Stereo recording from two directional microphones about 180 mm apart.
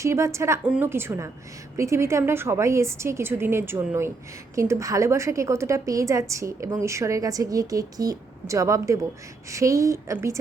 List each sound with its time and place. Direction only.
0.0 s a woman's voice: 15° right (ahead or behind)